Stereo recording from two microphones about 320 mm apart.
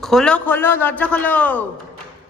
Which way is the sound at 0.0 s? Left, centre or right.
Centre.